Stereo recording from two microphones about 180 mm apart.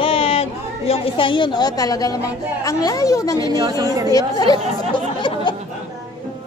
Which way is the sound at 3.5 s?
20° right (ahead or behind).